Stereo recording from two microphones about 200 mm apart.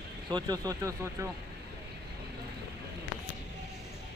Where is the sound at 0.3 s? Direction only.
20° right (ahead or behind).